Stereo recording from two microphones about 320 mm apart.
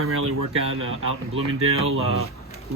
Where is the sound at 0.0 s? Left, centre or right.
Right.